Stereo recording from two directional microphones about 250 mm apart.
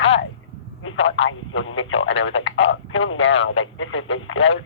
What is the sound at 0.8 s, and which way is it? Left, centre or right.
Speech, left.